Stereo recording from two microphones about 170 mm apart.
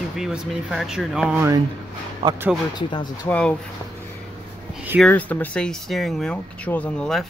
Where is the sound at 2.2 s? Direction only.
30° right (ahead or behind).